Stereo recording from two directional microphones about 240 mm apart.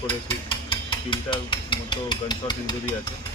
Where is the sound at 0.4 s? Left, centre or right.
Centre.